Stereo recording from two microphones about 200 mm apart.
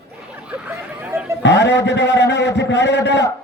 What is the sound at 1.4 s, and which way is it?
A man's voice, 60° left (ahead or behind).